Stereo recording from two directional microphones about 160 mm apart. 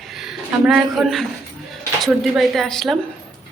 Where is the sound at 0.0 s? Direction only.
Centre (ahead or behind).